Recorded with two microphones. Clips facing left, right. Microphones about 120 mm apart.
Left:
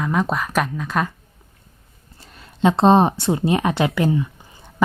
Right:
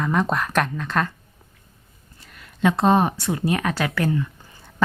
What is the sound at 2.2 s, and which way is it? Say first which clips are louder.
Speech: left 3 dB; 30° left (ahead or behind).